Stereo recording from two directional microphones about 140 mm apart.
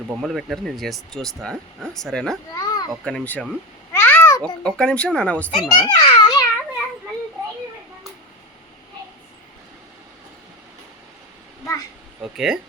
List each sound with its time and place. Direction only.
0.2 s speech: centre (ahead or behind)
2.5 s children playing: 25° left (ahead or behind)
2.9 s speech: 5° left (ahead or behind)
3.9 s babbling: 10° left (ahead or behind)
4.6 s speech: 5° left (ahead or behind)
5.5 s a child's voice: 30° left (ahead or behind)
12.2 s speech: 5° right (ahead or behind)